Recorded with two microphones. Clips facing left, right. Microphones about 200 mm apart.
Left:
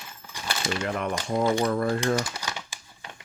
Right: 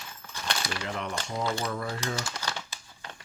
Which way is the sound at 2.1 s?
15° left (ahead or behind).